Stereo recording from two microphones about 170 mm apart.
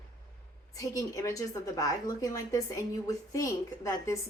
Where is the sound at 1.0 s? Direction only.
20° left (ahead or behind).